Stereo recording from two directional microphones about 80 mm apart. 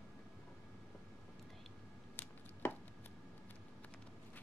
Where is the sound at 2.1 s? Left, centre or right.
Left.